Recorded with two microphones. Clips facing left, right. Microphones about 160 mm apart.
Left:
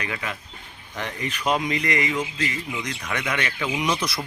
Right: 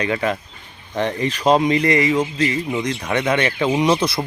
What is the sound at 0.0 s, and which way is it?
Speech, 35° right (ahead or behind).